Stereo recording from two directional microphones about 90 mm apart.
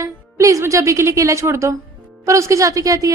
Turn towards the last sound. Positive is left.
turn(degrees=-40)  # may be behind; listen again after turning